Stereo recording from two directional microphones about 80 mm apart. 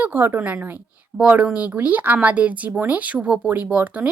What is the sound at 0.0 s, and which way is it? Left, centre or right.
Speech, right.